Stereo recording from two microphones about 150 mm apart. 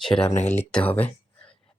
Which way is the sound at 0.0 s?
5° left (ahead or behind).